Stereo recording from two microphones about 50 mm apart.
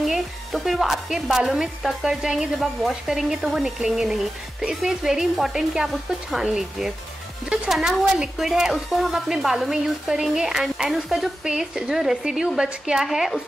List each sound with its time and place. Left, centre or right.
0.0 s speech: centre
13.0 s speech: centre